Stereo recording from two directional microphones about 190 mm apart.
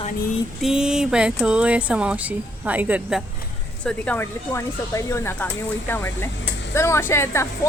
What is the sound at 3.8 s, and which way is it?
Speech, 5° left (ahead or behind).